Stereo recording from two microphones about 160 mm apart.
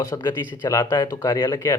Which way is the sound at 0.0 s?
15° left (ahead or behind).